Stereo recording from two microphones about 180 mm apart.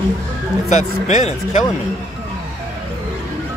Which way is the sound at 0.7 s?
40° left (ahead or behind).